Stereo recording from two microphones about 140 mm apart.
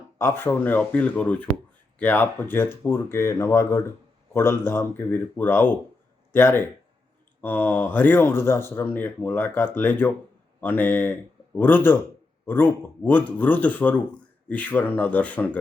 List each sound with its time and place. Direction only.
0.2 s speech: 15° left (ahead or behind)